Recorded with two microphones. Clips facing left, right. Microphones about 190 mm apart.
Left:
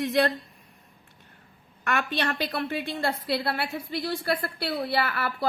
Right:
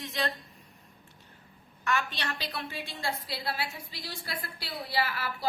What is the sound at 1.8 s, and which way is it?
A woman's voice, 55° left (ahead or behind).